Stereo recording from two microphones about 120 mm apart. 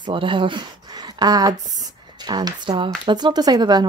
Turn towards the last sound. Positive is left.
turn(degrees=-35)  # may be behind; listen again after turning